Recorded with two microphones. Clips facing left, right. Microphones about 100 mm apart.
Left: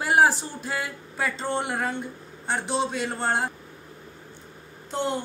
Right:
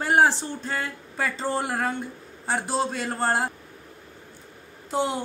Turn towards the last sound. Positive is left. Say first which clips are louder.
# right 2 dB
turn(degrees=-5)  # may be behind; listen again after turning